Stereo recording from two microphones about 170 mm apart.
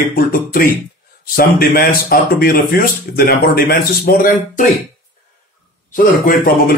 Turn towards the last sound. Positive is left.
turn(degrees=55)  # may be behind; listen again after turning